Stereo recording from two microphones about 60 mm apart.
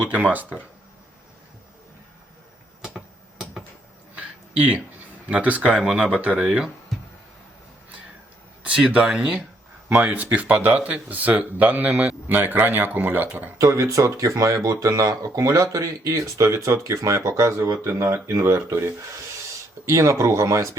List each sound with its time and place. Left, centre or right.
0.1 s speech: right
4.1 s a sound: right
5.3 s speech: right
5.7 s speech: centre
8.6 s speech: centre
9.9 s speech: right
13.6 s speech: right